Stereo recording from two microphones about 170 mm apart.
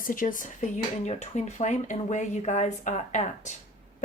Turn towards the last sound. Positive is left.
turn(degrees=45)  # may be behind; listen again after turning